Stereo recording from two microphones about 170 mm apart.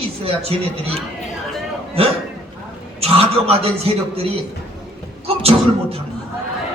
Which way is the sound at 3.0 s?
35° right (ahead or behind).